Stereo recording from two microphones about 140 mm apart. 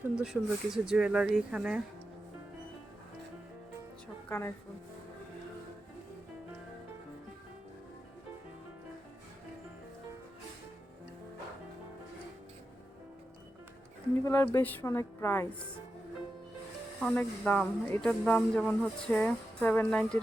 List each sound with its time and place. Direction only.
0.0 s speech: 5° right (ahead or behind)
4.3 s speech: 15° left (ahead or behind)
14.3 s speech: 15° left (ahead or behind)
17.0 s speech: 10° left (ahead or behind)